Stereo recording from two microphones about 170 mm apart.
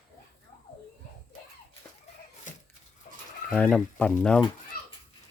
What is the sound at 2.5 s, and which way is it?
Dog, 45° left (ahead or behind).